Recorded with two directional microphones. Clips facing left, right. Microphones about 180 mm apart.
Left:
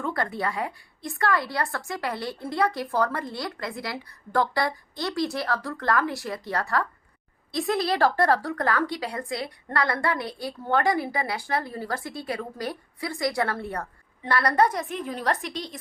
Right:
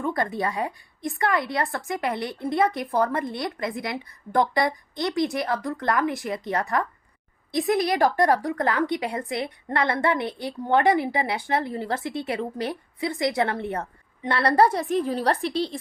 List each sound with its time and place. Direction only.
0.0 s a woman's voice: 20° right (ahead or behind)